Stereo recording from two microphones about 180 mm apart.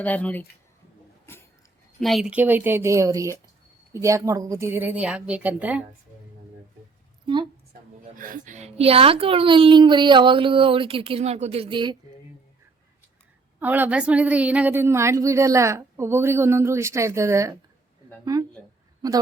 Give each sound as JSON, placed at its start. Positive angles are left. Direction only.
{"t": 0.0, "sound": "speech", "side_deg": 10}
{"t": 1.3, "sound": "a sound", "side_deg": 15}
{"t": 2.0, "sound": "a woman's voice", "side_deg": 0}
{"t": 7.7, "sound": "a woman's voice", "side_deg": -50}
{"t": 13.6, "sound": "a woman's voice", "side_deg": -10}